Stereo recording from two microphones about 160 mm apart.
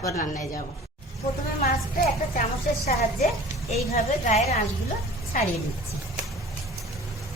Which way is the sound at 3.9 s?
40° left (ahead or behind).